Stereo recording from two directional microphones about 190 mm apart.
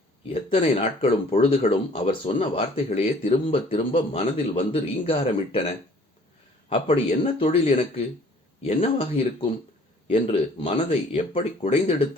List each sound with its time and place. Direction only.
0.6 s speech: 35° left (ahead or behind)
6.7 s a man's voice: 30° left (ahead or behind)